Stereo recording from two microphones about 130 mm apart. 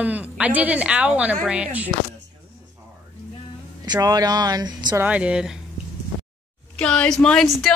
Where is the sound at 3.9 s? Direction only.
30° right (ahead or behind).